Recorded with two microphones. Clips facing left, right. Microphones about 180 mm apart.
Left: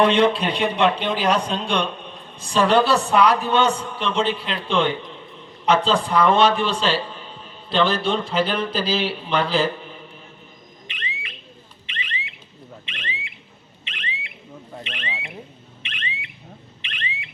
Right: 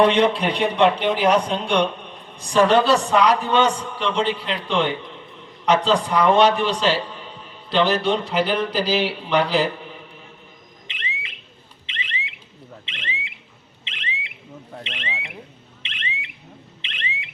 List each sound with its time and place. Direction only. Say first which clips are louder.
0.0 s speech: even; 15° right (ahead or behind)
10.8 s a sound: right 1 dB; 25° right (ahead or behind)
11.9 s alarm: even; 25° right (ahead or behind)
12.8 s a sound: right 1 dB; 25° right (ahead or behind)
13.8 s alarm: left 1 dB; 25° right (ahead or behind)
14.8 s speech: even; 25° right (ahead or behind)
15.8 s alarm: even; 25° right (ahead or behind)